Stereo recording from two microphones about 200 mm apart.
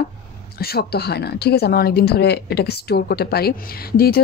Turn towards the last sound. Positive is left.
turn(degrees=50)  # may be behind; listen again after turning